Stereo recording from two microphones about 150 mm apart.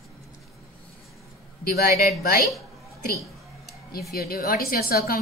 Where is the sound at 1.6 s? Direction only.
80° left.